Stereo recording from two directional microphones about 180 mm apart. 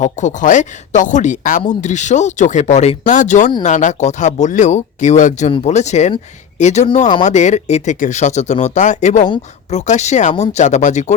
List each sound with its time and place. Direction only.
0.0 s speech: 40° left (ahead or behind)